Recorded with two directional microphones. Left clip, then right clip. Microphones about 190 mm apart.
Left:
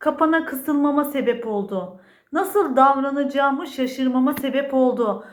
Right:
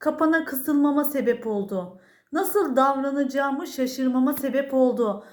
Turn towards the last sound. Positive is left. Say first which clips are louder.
# left 2 dB
turn(degrees=-50)  # may be behind; listen again after turning